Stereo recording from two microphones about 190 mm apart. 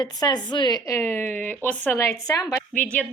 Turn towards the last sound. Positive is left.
turn(degrees=5)  # may be behind; listen again after turning